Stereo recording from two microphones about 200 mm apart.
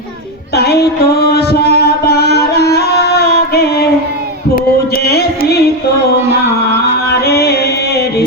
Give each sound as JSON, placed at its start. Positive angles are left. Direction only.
{"t": 0.5, "sound": "music", "side_deg": 55}
{"t": 5.0, "sound": "music", "side_deg": 55}
{"t": 7.1, "sound": "music", "side_deg": 55}